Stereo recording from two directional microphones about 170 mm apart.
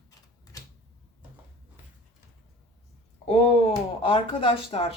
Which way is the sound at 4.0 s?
30° left (ahead or behind).